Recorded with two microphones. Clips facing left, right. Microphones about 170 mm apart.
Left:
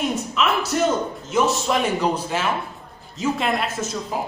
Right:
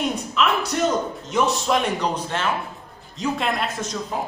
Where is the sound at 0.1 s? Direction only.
Centre (ahead or behind).